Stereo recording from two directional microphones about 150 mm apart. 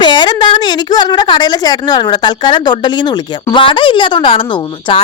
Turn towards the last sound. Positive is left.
turn(degrees=35)  # may be behind; listen again after turning